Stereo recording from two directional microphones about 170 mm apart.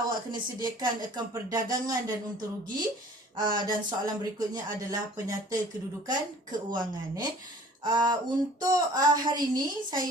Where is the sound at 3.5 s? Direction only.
25° right (ahead or behind).